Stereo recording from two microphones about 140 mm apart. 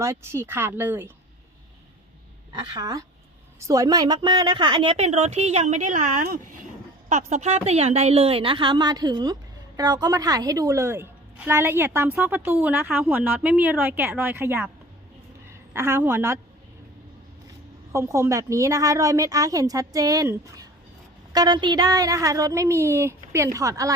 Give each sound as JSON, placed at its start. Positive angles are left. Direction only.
{"t": 0.0, "sound": "speech", "side_deg": -20}
{"t": 2.5, "sound": "a woman's voice", "side_deg": -30}
{"t": 7.1, "sound": "a woman's voice", "side_deg": -55}
{"t": 15.7, "sound": "speech", "side_deg": -15}
{"t": 17.9, "sound": "a woman's voice", "side_deg": -20}